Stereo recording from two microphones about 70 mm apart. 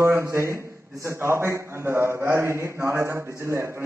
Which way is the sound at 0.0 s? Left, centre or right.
Right.